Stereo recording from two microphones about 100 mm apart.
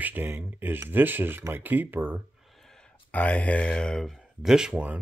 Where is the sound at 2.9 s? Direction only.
15° left (ahead or behind).